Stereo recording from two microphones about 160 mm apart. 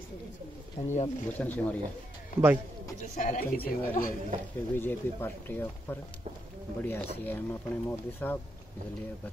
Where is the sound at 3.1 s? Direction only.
55° left (ahead or behind).